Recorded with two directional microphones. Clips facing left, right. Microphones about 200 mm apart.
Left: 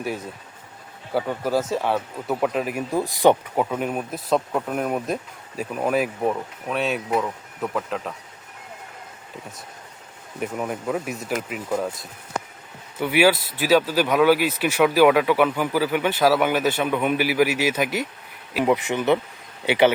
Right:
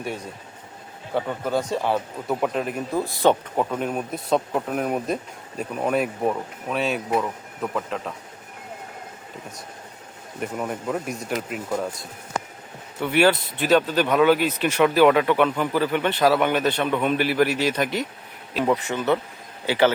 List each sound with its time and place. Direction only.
0.0 s speech: centre (ahead or behind)
10.4 s speech: centre (ahead or behind); by 19.9 s 15° left (ahead or behind)